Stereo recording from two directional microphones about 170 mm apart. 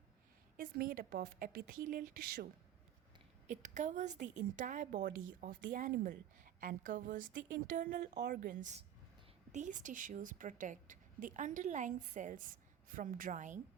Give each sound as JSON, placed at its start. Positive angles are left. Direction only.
{"t": 0.5, "sound": "a woman's voice", "side_deg": -55}
{"t": 3.4, "sound": "a woman's voice", "side_deg": -45}